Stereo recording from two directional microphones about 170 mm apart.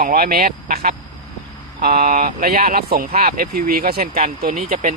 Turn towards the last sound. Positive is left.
turn(degrees=-50)  # may be behind; listen again after turning